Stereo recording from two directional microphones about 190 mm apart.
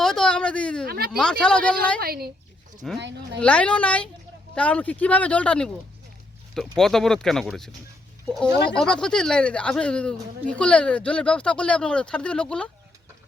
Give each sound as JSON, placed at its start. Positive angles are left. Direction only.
{"t": 0.0, "sound": "a sound", "side_deg": 5}
{"t": 0.9, "sound": "a sound", "side_deg": -55}
{"t": 1.1, "sound": "speech", "side_deg": 5}
{"t": 2.0, "sound": "a woman's voice", "side_deg": -50}
{"t": 2.8, "sound": "speech", "side_deg": 0}
{"t": 8.7, "sound": "speech", "side_deg": 5}